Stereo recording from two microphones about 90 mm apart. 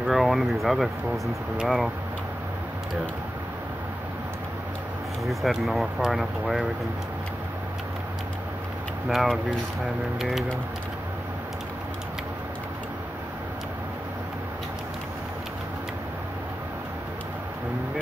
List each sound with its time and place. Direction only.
0.0 s speech: centre (ahead or behind)
5.2 s speech: centre (ahead or behind)
9.1 s speech: 5° right (ahead or behind)